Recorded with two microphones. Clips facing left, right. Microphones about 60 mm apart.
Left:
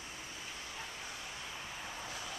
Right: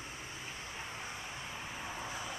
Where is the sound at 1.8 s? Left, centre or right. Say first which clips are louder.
Right 4 dB; centre.